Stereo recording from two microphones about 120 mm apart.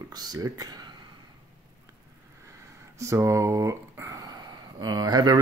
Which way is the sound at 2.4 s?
25° right (ahead or behind).